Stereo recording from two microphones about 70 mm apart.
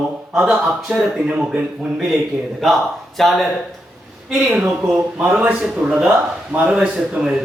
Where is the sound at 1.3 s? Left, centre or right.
Centre.